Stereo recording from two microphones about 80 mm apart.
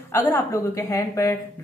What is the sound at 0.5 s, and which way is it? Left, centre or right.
Speech, left.